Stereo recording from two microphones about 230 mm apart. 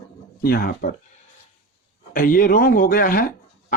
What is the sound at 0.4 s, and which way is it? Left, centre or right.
Speech, left.